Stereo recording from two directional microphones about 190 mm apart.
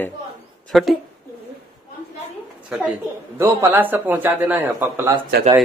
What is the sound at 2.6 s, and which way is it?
Speech, 5° right (ahead or behind).